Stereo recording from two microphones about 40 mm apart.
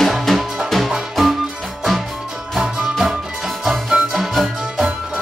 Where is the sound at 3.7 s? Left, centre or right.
Centre.